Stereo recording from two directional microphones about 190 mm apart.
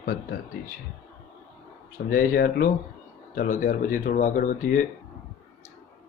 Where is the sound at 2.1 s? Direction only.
50° left (ahead or behind).